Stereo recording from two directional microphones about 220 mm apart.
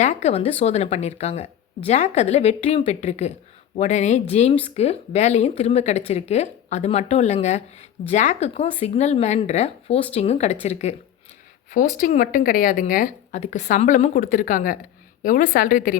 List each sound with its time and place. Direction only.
0.0 s speech: 30° left (ahead or behind)